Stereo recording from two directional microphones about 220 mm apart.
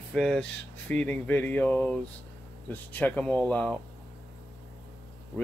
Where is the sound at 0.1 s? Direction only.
5° left (ahead or behind).